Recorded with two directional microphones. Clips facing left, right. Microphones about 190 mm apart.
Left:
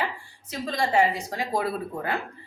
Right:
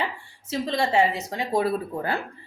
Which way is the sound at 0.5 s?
25° right (ahead or behind).